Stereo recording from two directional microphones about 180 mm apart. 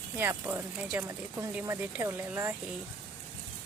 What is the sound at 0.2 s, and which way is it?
Speech, 10° right (ahead or behind).